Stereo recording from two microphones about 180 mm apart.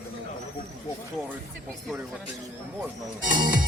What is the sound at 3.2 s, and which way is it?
Speech, 50° right (ahead or behind).